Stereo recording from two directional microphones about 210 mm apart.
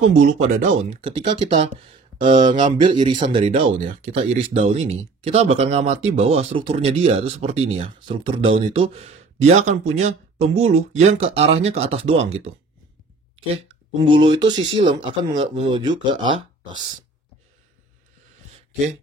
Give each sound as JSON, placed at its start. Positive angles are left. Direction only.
{"t": 0.4, "sound": "speech", "side_deg": -40}
{"t": 1.0, "sound": "speech", "side_deg": -25}
{"t": 14.1, "sound": "speech", "side_deg": -25}